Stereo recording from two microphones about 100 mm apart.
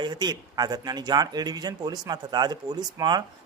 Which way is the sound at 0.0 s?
45° right (ahead or behind).